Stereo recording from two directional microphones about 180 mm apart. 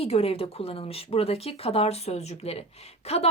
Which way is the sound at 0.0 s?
35° left (ahead or behind).